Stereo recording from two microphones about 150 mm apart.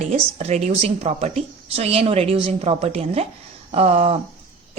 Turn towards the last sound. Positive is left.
turn(degrees=-40)  # may be behind; listen again after turning